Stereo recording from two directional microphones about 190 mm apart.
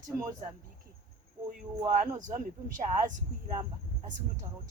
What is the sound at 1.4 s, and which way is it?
Speech, 10° right (ahead or behind).